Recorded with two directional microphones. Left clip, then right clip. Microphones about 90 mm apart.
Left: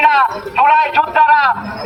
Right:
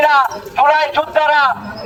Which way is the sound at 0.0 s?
20° right (ahead or behind).